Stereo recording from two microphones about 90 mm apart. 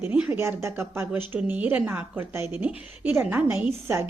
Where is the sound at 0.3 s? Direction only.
30° right (ahead or behind).